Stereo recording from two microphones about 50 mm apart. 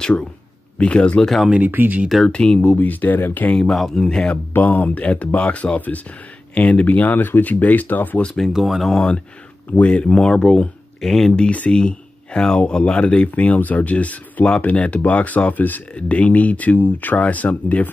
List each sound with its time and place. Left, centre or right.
0.7 s speech: left
1.2 s speech: centre
1.7 s speech: right
2.2 s speech: left
3.5 s speech: centre
4.6 s speech: left
8.5 s speech: centre
8.9 s speech: centre
9.7 s speech: left
10.1 s speech: centre
11.1 s speech: centre
11.3 s speech: left
15.9 s speech: left